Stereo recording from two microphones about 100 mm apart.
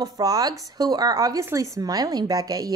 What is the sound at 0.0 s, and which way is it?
A woman's voice, 40° right (ahead or behind).